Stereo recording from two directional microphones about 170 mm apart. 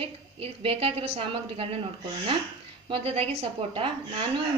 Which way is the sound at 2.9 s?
35° right (ahead or behind).